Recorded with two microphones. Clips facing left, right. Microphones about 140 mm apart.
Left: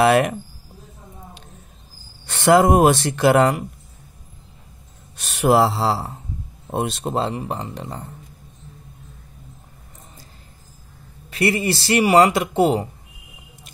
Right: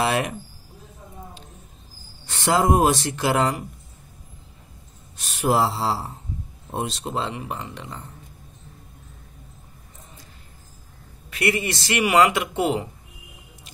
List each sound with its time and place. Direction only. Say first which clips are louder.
0.0 s a sound: left 7 dB; 60° left (ahead or behind)
2.2 s speech: left 6 dB; 65° left (ahead or behind)
5.1 s speech: left 5 dB; 70° left (ahead or behind)
6.7 s speech: left 5 dB; 60° left (ahead or behind); by 8.0 s 35° left (ahead or behind)
11.2 s speech: left 4 dB; 30° left (ahead or behind)